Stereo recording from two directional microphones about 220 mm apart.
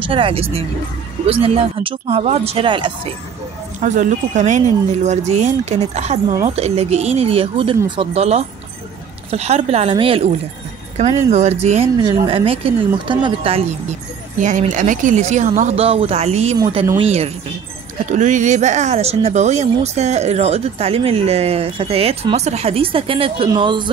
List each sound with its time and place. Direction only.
0.0 s speech: 25° right (ahead or behind)
3.8 s speech: 35° right (ahead or behind)
14.4 s speech: 35° right (ahead or behind)